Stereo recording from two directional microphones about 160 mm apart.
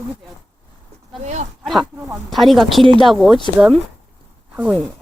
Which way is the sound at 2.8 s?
30° right (ahead or behind).